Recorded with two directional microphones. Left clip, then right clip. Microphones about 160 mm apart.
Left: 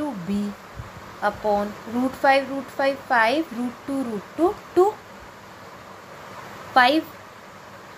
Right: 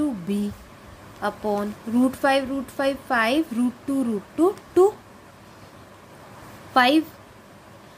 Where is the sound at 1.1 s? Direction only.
45° right (ahead or behind).